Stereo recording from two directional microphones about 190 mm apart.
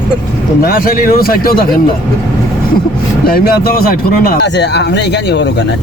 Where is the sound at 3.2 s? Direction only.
50° left (ahead or behind).